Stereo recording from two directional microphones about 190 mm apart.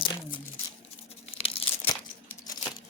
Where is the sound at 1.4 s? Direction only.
30° left (ahead or behind).